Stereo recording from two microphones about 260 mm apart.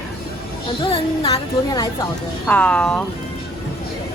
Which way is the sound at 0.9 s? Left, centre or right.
Centre.